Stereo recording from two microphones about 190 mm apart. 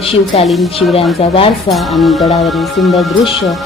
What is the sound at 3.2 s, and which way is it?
Speech, 30° left (ahead or behind).